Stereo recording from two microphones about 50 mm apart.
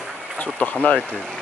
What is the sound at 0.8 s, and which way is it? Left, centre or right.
Speech, left.